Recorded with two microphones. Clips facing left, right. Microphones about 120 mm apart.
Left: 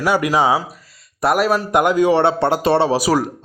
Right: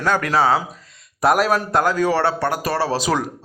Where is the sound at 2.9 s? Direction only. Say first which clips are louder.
Left 4 dB; 10° left (ahead or behind).